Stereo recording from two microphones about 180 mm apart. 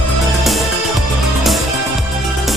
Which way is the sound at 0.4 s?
Centre (ahead or behind).